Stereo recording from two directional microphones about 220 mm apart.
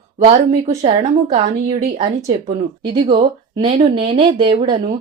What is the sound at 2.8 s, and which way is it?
A woman's voice, 20° right (ahead or behind).